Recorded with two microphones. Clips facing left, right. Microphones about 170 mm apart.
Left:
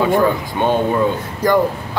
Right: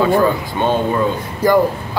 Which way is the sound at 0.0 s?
15° left (ahead or behind).